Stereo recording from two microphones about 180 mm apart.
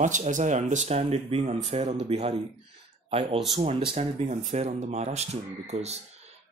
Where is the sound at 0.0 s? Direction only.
45° right (ahead or behind).